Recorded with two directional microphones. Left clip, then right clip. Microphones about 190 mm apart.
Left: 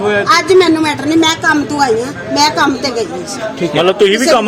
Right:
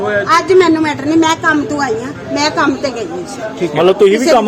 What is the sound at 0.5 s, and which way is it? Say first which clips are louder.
A woman's voice: even; centre (ahead or behind).